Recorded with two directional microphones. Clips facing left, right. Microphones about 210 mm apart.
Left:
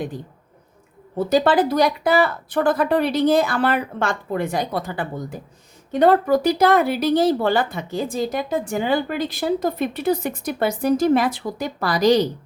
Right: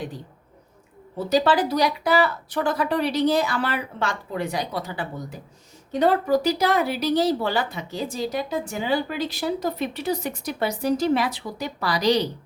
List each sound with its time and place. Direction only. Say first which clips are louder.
1.3 s speech: left 3 dB; 50° left (ahead or behind)